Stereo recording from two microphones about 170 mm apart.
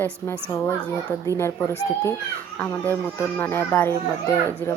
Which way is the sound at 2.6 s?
10° left (ahead or behind).